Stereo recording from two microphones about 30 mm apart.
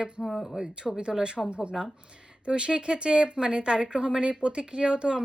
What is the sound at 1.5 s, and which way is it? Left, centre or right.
Speech, right.